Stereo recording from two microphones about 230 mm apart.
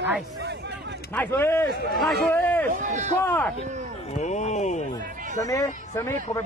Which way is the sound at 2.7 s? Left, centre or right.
Right.